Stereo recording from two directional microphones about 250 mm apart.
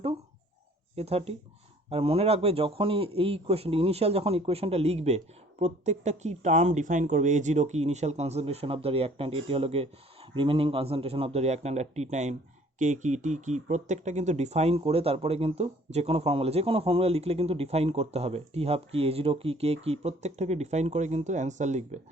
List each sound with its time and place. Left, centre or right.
0.9 s a man's voice: right